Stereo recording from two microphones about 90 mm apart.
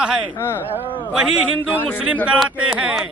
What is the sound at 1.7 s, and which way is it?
Speech, 20° left (ahead or behind).